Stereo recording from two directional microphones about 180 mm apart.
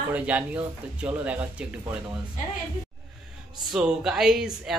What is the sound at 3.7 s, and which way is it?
Speech, 5° right (ahead or behind).